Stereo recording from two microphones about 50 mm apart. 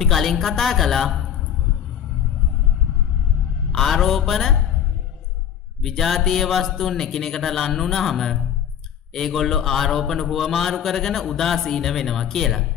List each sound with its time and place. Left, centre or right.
0.0 s a man's voice: centre
3.7 s a man's voice: centre
5.8 s a man's voice: centre